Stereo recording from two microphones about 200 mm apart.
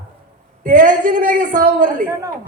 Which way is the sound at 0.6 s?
40° right (ahead or behind).